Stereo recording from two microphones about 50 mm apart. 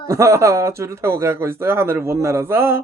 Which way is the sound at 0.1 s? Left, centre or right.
Right.